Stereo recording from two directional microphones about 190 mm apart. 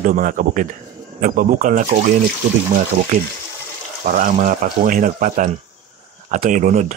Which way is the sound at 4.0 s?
45° right (ahead or behind).